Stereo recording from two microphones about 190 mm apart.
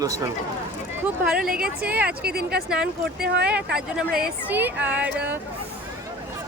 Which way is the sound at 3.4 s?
5° right (ahead or behind).